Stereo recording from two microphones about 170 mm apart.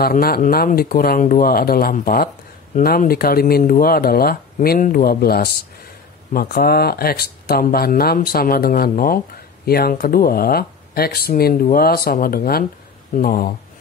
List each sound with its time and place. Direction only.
0.0 s speech: 60° left (ahead or behind)